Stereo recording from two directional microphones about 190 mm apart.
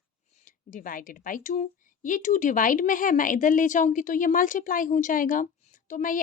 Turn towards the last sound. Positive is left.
turn(degrees=45)  # may be behind; listen again after turning